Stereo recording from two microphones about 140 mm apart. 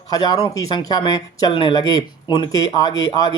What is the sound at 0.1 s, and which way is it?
Speech, 25° left (ahead or behind).